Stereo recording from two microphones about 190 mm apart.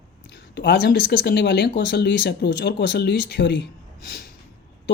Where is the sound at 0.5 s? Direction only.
65° left (ahead or behind).